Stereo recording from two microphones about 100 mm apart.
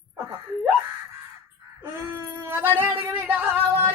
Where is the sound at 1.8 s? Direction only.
25° right (ahead or behind).